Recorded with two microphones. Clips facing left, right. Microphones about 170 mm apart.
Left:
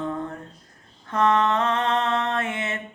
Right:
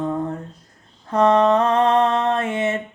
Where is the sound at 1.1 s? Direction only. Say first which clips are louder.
Right 6 dB; 30° right (ahead or behind).